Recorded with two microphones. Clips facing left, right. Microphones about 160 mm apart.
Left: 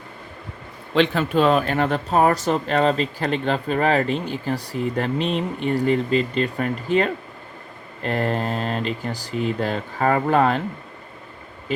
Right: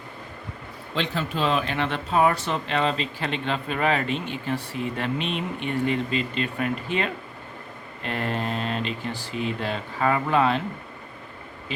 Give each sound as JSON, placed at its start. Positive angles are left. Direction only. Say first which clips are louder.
{"t": 0.9, "sound": "speech", "louder": "left 9 dB", "side_deg": 60}